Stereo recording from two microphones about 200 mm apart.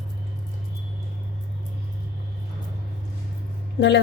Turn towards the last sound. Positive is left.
turn(degrees=55)  # may be behind; listen again after turning